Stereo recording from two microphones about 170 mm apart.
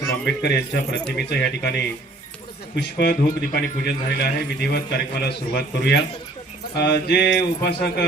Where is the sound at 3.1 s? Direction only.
65° left (ahead or behind).